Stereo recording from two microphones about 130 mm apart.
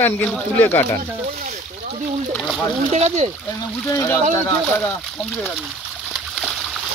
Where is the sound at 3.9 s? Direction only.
15° left (ahead or behind).